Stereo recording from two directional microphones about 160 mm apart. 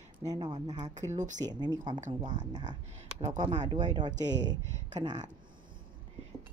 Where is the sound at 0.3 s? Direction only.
25° right (ahead or behind).